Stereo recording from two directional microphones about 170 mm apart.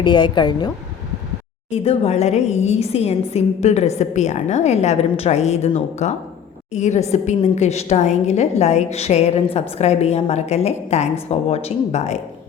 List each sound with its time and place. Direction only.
0.0 s a woman's voice: 25° left (ahead or behind)
1.7 s a woman's voice: 40° left (ahead or behind)